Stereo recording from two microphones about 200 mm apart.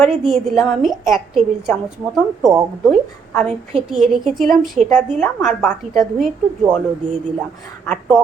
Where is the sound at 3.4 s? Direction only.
35° right (ahead or behind).